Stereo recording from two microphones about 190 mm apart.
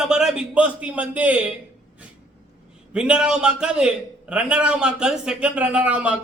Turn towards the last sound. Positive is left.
turn(degrees=-5)  # may be behind; listen again after turning